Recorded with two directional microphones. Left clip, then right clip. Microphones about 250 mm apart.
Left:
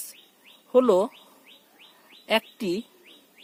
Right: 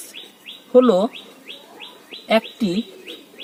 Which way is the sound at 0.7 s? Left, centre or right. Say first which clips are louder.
Right 5 dB; left.